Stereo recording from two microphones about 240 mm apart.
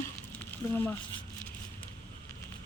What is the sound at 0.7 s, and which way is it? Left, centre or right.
Speech, centre.